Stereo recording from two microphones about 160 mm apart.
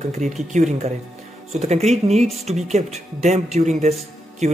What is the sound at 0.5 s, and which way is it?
Speech, 50° right (ahead or behind).